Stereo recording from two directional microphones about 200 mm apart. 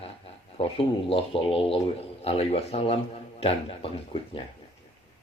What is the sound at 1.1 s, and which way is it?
A man's voice, 25° left (ahead or behind).